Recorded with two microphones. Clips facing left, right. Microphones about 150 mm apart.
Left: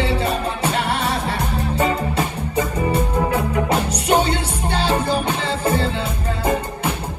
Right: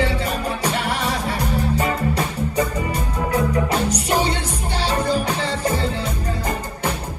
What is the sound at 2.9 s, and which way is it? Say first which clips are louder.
Music: left 4 dB; 30° left (ahead or behind).